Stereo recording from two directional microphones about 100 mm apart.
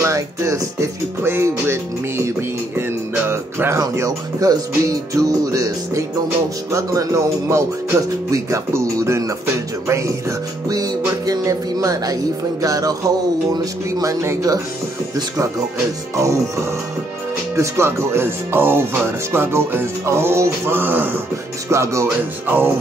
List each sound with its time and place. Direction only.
0.0 s speech: 30° right (ahead or behind)
16.2 s speech: 30° right (ahead or behind)